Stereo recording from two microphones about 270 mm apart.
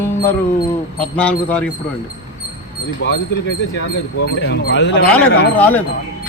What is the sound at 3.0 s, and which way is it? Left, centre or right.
Speech, left.